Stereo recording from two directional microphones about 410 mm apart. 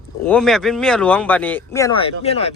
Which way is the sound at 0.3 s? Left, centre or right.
Centre.